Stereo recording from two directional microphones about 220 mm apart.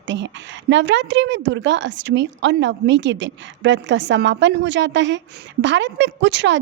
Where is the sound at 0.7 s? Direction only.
55° right (ahead or behind).